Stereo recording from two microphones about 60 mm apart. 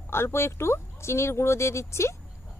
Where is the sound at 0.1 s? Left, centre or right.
Left.